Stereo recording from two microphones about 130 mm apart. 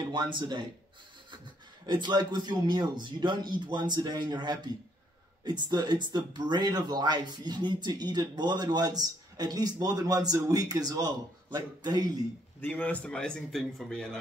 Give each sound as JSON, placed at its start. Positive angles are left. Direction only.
{"t": 0.1, "sound": "speech", "side_deg": -35}
{"t": 1.9, "sound": "speech", "side_deg": -35}
{"t": 12.5, "sound": "a man's voice", "side_deg": 15}